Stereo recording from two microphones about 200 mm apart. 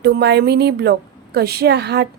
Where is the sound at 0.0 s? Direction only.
55° right (ahead or behind).